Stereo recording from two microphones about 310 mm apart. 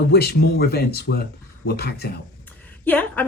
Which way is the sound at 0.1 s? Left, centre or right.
Left.